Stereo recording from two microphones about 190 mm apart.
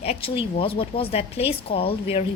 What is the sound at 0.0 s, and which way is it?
A woman's voice, 30° left (ahead or behind).